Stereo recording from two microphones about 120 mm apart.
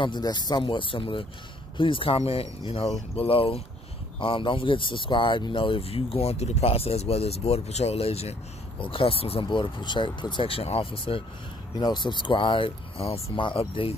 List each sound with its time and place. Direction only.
0.0 s speech: 35° left (ahead or behind)
11.7 s speech: 40° left (ahead or behind)